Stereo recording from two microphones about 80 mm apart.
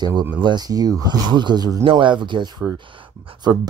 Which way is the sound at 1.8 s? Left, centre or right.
Right.